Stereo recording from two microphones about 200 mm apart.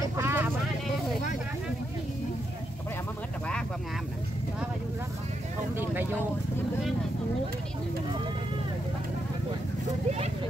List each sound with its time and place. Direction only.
0.0 s vehicle: 15° right (ahead or behind)
10.0 s vehicle: 30° right (ahead or behind)